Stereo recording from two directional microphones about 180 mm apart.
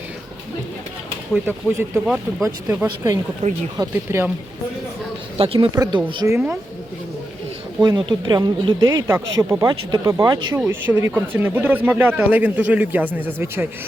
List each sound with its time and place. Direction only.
1.3 s a man's voice: 10° right (ahead or behind)
3.4 s speech: 30° right (ahead or behind)
3.8 s a man's voice: 15° right (ahead or behind)
5.5 s a man's voice: 20° right (ahead or behind)
7.8 s a man's voice: 25° right (ahead or behind)